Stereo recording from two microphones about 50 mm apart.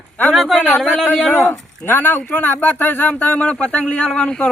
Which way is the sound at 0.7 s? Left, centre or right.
Centre.